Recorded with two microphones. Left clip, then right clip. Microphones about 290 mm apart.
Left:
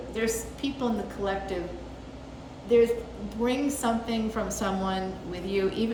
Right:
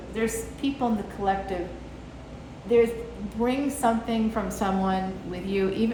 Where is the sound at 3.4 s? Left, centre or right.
Centre.